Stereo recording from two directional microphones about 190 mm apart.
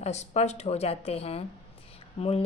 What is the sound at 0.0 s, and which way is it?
A woman's voice, 35° left (ahead or behind).